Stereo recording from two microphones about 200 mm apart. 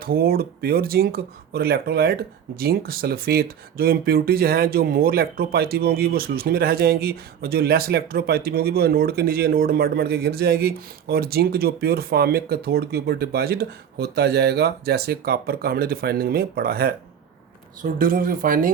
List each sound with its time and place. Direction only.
0.0 s speech: 50° right (ahead or behind)